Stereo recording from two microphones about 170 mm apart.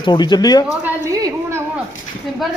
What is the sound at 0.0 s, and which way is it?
Speech, 25° left (ahead or behind).